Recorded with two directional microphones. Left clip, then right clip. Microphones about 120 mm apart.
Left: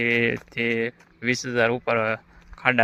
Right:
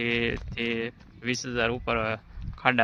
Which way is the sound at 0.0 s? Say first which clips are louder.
Left 6 dB; 35° left (ahead or behind).